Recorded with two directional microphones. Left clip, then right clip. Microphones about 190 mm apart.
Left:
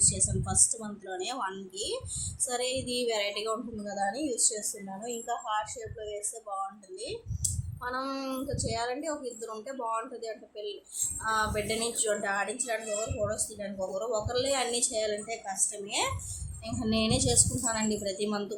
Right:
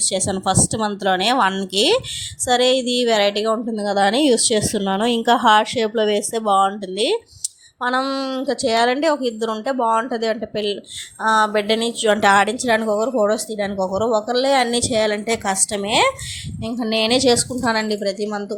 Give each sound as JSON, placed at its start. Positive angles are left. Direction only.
{"t": 0.4, "sound": "a woman's voice", "side_deg": -45}
{"t": 16.6, "sound": "a woman's voice", "side_deg": -40}